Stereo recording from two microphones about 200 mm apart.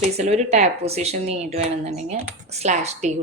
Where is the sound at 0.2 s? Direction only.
35° right (ahead or behind).